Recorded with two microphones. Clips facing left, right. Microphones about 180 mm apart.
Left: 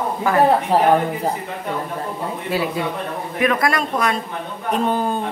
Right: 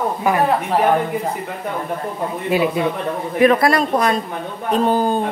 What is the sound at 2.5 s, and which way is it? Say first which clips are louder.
Speech: right 5 dB; 20° right (ahead or behind).